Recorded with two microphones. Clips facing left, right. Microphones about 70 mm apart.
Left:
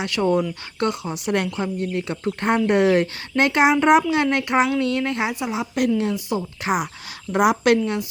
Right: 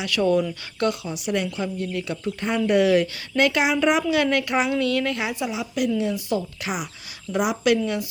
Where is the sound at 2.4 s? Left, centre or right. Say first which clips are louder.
Left 2 dB; left.